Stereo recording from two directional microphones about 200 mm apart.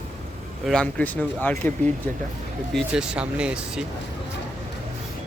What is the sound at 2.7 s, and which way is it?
Speech, 5° right (ahead or behind).